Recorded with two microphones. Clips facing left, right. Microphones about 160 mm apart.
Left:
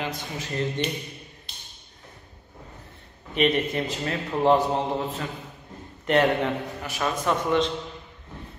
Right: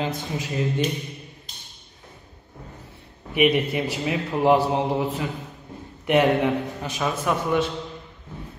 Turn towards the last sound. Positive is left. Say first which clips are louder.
# even
turn(degrees=-10)  # may be behind; listen again after turning